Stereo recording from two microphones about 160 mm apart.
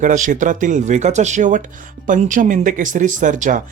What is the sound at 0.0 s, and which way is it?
Speech, 55° right (ahead or behind).